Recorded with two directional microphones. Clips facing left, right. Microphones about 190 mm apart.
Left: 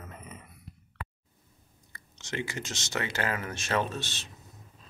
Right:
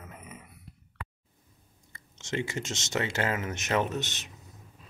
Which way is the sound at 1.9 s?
25° right (ahead or behind).